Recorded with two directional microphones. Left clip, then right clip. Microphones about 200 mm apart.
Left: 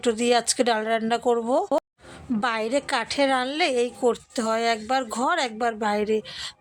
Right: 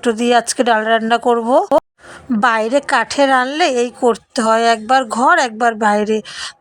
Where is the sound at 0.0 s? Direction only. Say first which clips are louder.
Right 8 dB; 25° right (ahead or behind).